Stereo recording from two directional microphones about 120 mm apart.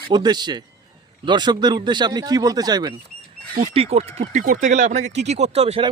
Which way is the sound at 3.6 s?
55° right (ahead or behind).